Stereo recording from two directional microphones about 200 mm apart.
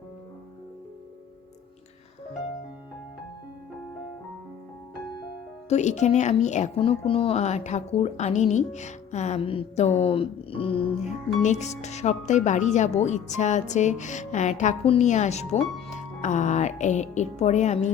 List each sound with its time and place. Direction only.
5.6 s speech: 35° left (ahead or behind)